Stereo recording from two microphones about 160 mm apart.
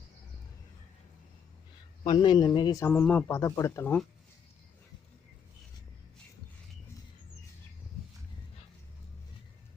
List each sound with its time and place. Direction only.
2.0 s a man's voice: 30° left (ahead or behind)
2.8 s speech: 10° left (ahead or behind)